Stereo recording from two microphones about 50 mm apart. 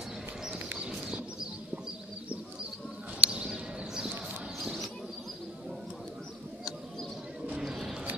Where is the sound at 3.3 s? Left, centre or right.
Centre.